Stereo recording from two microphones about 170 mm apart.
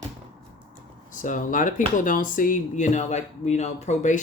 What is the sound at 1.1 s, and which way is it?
Speech, 50° left (ahead or behind).